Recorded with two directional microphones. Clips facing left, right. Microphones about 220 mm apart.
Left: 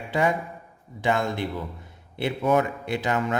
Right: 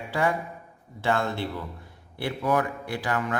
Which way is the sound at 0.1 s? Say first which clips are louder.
Left 2 dB; 20° left (ahead or behind).